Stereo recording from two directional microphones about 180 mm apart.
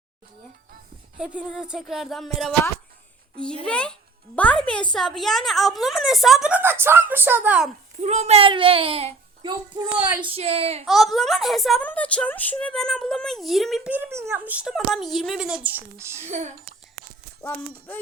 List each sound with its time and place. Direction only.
1.2 s speech: 5° right (ahead or behind)
3.6 s speech: 5° left (ahead or behind)
8.0 s a child's voice: 35° right (ahead or behind)
10.8 s speech: centre (ahead or behind)
16.2 s a child's voice: 40° right (ahead or behind)